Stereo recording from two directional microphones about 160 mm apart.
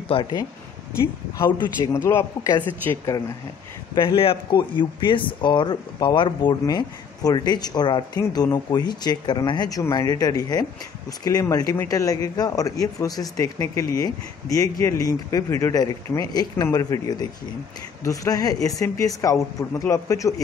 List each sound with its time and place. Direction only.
0.1 s speech: 25° left (ahead or behind)
3.9 s speech: 30° left (ahead or behind)